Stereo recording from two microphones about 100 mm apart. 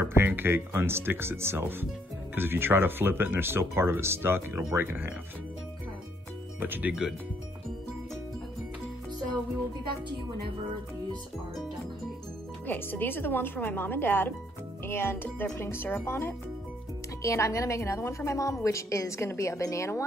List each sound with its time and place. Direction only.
0.0 s speech: 25° right (ahead or behind)
6.6 s speech: 15° right (ahead or behind)
12.6 s a woman's voice: 20° left (ahead or behind)